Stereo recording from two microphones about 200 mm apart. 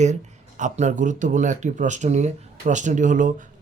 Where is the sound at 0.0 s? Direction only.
35° right (ahead or behind).